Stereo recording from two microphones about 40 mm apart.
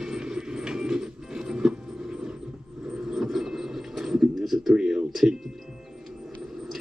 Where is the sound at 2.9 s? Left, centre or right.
Centre.